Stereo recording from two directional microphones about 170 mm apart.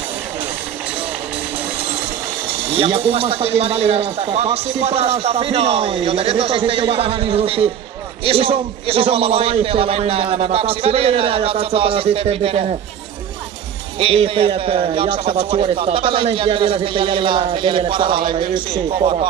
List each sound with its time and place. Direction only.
2.7 s speech: 35° right (ahead or behind)
13.9 s speech: 30° right (ahead or behind)